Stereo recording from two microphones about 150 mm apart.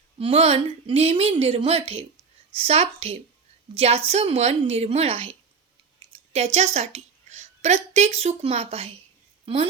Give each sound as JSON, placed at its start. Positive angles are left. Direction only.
{"t": 0.2, "sound": "a woman's voice", "side_deg": -40}
{"t": 6.0, "sound": "a sound", "side_deg": -40}
{"t": 6.3, "sound": "a woman's voice", "side_deg": -45}